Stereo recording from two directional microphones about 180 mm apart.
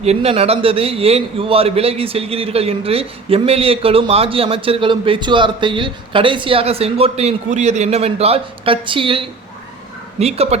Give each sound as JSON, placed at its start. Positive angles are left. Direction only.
{"t": 0.0, "sound": "a man's voice", "side_deg": -35}